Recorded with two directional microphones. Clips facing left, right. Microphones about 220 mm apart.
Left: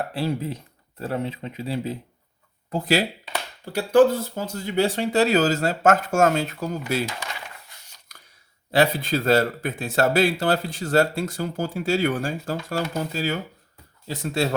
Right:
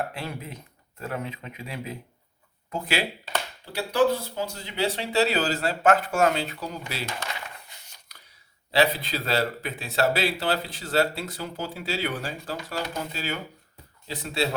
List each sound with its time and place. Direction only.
0.1 s speech: 35° left (ahead or behind)
8.7 s speech: 50° left (ahead or behind)